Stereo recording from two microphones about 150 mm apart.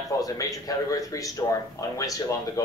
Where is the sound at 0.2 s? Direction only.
25° left (ahead or behind).